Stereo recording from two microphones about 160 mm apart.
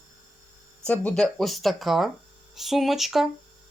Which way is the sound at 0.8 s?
10° left (ahead or behind).